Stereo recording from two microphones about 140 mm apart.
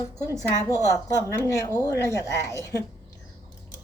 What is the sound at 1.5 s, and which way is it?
A woman's voice, 25° left (ahead or behind).